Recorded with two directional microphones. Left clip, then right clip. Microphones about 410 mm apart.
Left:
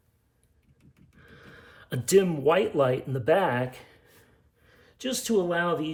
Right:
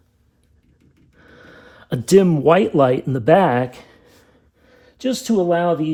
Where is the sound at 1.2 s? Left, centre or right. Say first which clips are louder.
Right 6 dB; centre.